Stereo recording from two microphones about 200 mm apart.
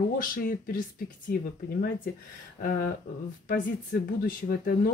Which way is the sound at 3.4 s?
40° left (ahead or behind).